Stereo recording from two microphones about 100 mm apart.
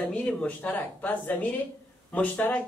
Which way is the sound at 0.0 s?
10° left (ahead or behind).